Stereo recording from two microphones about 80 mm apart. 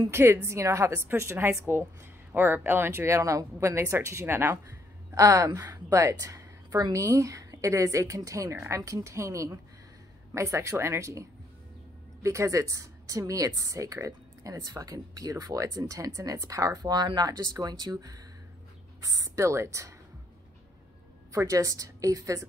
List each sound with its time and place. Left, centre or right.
0.1 s speech: right
5.1 s a woman's voice: right
21.3 s a woman's voice: right